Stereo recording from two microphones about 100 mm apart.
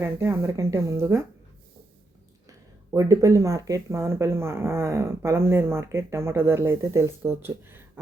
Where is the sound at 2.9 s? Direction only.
30° right (ahead or behind).